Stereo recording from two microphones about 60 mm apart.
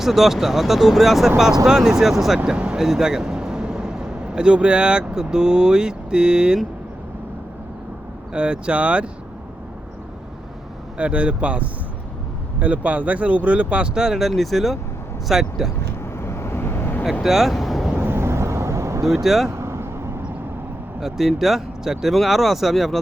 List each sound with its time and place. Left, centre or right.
0.0 s a man's voice: centre
8.3 s speech: centre
10.9 s speech: right; by 15.7 s centre
16.1 s vehicle: left
17.2 s speech: centre
17.9 s vehicle: right
19.0 s speech: centre
19.5 s vehicle: right
21.0 s speech: centre